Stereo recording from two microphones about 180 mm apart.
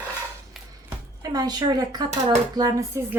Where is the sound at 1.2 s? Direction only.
20° right (ahead or behind).